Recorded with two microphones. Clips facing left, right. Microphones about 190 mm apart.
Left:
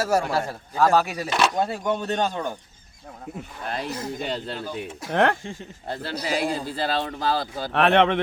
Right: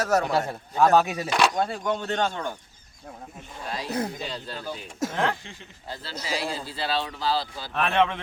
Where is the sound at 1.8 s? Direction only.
20° left (ahead or behind).